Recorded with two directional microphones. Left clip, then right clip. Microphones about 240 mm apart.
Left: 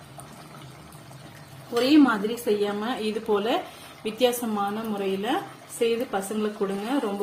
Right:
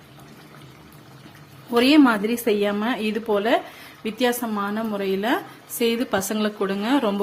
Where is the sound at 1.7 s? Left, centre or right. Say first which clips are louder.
Right 3 dB; right.